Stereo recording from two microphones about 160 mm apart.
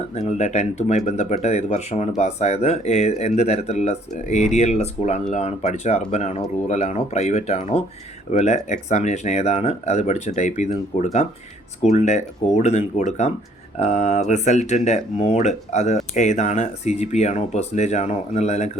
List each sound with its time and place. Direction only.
0.1 s speech: 40° left (ahead or behind)